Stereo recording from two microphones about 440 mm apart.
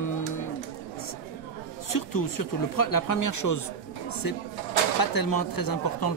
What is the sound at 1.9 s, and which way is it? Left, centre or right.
Speech, left.